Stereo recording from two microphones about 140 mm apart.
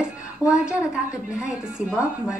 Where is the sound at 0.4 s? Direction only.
20° left (ahead or behind).